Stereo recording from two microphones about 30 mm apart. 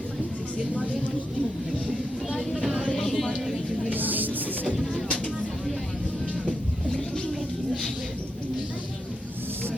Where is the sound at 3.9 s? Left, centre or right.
Right.